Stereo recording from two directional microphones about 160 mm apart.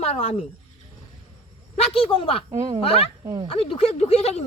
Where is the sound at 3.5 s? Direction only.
35° left (ahead or behind).